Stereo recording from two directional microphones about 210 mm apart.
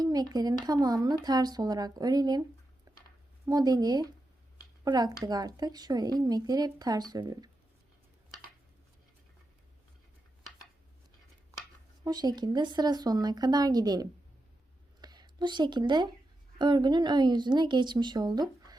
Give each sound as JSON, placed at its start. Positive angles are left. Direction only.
{"t": 0.0, "sound": "speech", "side_deg": -20}
{"t": 2.9, "sound": "a sound", "side_deg": -15}
{"t": 3.4, "sound": "speech", "side_deg": -15}
{"t": 12.0, "sound": "speech", "side_deg": -20}